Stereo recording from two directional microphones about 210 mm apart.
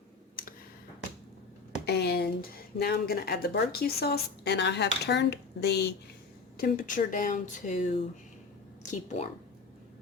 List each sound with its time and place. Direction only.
1.8 s speech: 50° left (ahead or behind)
6.6 s speech: 40° left (ahead or behind)